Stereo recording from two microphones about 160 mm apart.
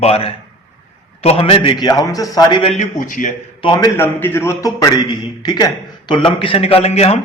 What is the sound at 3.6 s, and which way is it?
Speech, 30° left (ahead or behind).